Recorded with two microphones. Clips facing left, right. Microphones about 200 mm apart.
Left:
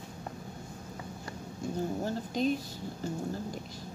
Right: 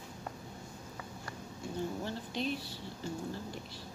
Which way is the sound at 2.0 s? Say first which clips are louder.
Left 6 dB; 40° left (ahead or behind).